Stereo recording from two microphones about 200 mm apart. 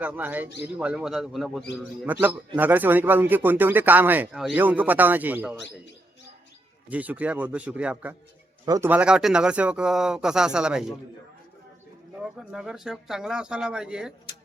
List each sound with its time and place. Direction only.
0.0 s speech: 10° right (ahead or behind)
6.9 s speech: 10° right (ahead or behind)
8.6 s speech: 20° right (ahead or behind)
8.9 s speech: 5° right (ahead or behind)
12.1 s speech: 5° right (ahead or behind)